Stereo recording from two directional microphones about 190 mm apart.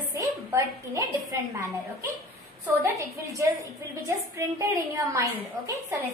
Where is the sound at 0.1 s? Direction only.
15° right (ahead or behind).